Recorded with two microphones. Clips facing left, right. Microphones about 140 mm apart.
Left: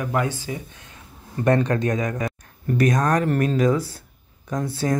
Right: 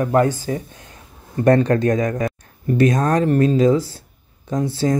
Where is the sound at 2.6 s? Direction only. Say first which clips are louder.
Right 3 dB; 25° right (ahead or behind).